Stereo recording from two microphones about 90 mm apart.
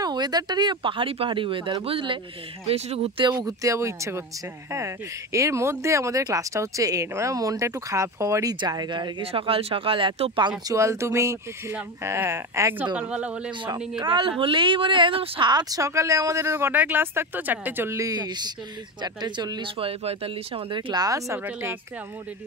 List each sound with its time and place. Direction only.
0.0 s speech: 50° right (ahead or behind); by 2.1 s 80° right
2.6 s speech: 90° right
3.3 s speech: 50° right (ahead or behind)
3.6 s speech: 35° right (ahead or behind)
8.5 s speech: 50° right (ahead or behind)
9.2 s speech: 90° right; by 10.5 s 70° right (ahead or behind)
10.7 s speech: 35° right (ahead or behind)
12.7 s a woman's voice: 15° right (ahead or behind)
13.9 s a woman's voice: 60° right (ahead or behind)
14.4 s speech: 70° right (ahead or behind)
15.5 s speech: 40° right (ahead or behind); by 17.9 s 20° right (ahead or behind)
17.9 s speech: 45° right (ahead or behind)
19.6 s speech: 90° right
20.9 s speech: 40° right (ahead or behind)